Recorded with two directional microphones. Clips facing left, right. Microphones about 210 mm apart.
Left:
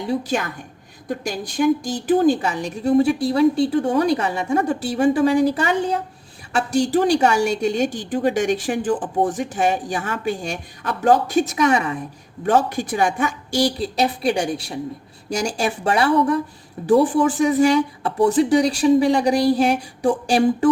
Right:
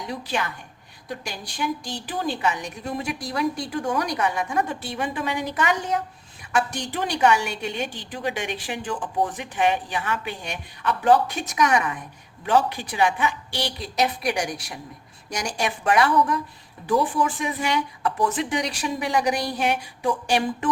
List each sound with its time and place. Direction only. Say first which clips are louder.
0.0 s a woman's voice: left 9 dB; 30° left (ahead or behind)
1.0 s a woman's voice: left 8 dB; 50° left (ahead or behind); by 7.0 s 30° left (ahead or behind)
7.0 s a woman's voice: left 5 dB; 40° left (ahead or behind)
11.5 s speech: left 4 dB; 25° left (ahead or behind)
12.5 s a woman's voice: left 3 dB; 50° left (ahead or behind)